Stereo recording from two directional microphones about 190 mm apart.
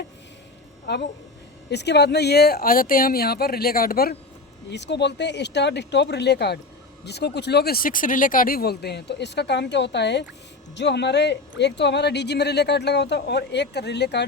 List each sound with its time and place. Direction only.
0.9 s speech: 60° left (ahead or behind)
4.7 s speech: 65° left (ahead or behind)